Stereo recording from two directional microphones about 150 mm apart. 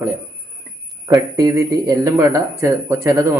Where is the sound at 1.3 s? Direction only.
25° right (ahead or behind).